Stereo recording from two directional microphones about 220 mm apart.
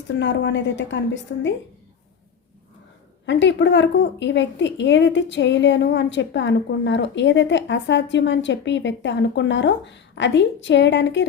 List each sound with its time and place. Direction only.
0.1 s a woman's voice: 55° left (ahead or behind)
3.2 s a woman's voice: 55° left (ahead or behind)